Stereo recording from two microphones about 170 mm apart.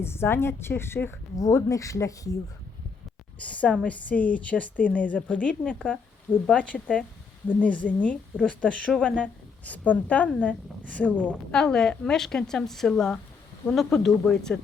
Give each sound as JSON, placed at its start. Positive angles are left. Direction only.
{"t": 0.0, "sound": "a woman's voice", "side_deg": 15}
{"t": 3.4, "sound": "a woman's voice", "side_deg": 10}